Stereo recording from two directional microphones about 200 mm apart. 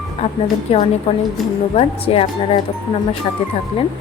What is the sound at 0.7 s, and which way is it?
A woman's voice, 30° left (ahead or behind).